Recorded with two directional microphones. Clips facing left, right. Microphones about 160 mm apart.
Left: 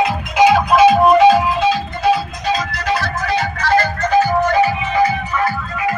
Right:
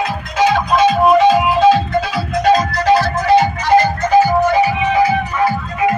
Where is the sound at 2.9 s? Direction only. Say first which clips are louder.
Right 8 dB; 20° right (ahead or behind).